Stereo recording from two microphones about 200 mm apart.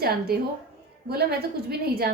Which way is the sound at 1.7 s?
50° right (ahead or behind).